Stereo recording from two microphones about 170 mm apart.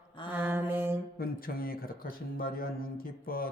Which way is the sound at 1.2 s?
60° left (ahead or behind).